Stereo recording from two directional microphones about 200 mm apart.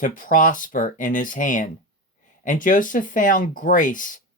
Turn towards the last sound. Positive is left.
turn(degrees=40)  # may be behind; listen again after turning